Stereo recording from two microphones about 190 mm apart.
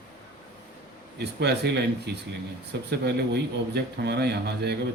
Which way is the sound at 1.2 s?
60° right (ahead or behind).